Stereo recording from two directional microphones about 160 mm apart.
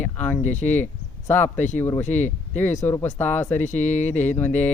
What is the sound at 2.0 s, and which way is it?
Speech, 50° left (ahead or behind).